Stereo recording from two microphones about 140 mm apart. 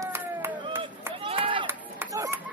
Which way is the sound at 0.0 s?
15° right (ahead or behind).